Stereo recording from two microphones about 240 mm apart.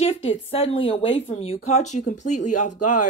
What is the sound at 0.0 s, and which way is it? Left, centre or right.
Speech, left.